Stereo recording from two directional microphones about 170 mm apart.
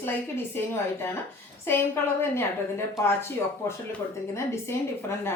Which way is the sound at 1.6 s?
15° left (ahead or behind).